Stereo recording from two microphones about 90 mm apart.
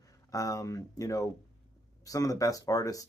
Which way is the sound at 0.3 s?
40° left (ahead or behind).